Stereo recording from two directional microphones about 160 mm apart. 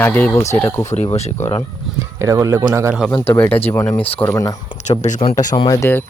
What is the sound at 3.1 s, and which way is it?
Speech, 35° left (ahead or behind).